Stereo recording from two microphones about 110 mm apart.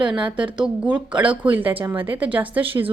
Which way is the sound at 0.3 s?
10° right (ahead or behind).